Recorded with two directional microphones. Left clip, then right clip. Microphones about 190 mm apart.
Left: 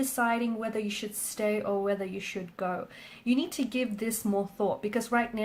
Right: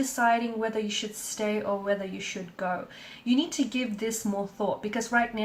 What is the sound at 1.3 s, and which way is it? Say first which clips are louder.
Speech: even; 45° left (ahead or behind).